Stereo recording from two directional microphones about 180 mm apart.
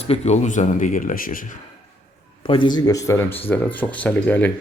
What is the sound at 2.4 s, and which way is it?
Speech, 30° left (ahead or behind).